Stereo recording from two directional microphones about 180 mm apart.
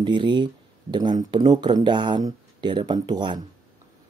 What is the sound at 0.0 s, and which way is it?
Speech, 25° right (ahead or behind).